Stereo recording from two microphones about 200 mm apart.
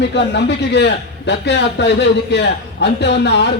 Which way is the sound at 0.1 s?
60° left (ahead or behind).